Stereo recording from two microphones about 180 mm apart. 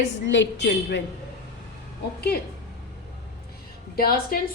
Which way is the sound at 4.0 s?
55° left (ahead or behind).